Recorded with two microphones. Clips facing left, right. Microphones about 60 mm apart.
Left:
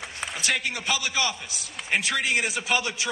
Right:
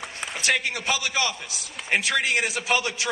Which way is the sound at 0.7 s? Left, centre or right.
Right.